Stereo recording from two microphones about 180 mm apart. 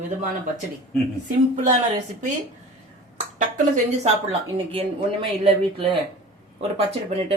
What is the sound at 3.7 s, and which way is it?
Speech, 35° right (ahead or behind).